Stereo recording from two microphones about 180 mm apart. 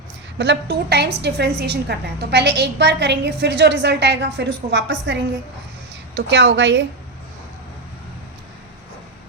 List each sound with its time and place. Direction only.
0.3 s a woman's voice: 75° right (ahead or behind)